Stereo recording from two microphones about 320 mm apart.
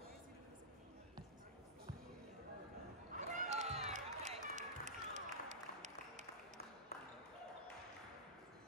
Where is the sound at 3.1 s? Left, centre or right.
Right.